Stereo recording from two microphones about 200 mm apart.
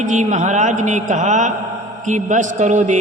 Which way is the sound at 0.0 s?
35° right (ahead or behind).